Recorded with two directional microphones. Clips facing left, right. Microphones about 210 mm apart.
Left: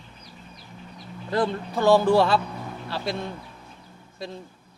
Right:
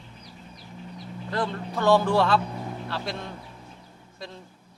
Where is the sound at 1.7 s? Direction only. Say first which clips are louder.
Left 3 dB; 5° left (ahead or behind).